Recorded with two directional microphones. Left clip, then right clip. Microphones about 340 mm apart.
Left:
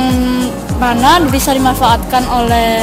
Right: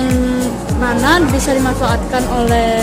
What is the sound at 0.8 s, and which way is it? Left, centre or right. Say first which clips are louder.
Speech: left 4 dB; left.